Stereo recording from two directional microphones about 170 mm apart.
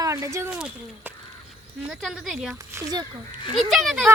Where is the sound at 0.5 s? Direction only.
5° right (ahead or behind).